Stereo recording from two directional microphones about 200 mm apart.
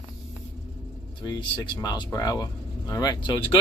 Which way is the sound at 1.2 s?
20° left (ahead or behind).